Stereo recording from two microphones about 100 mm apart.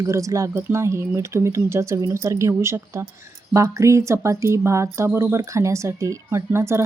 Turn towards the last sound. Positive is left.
turn(degrees=-25)  # may be behind; listen again after turning